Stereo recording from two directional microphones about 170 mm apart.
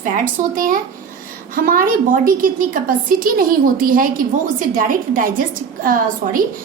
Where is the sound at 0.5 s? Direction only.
55° right (ahead or behind).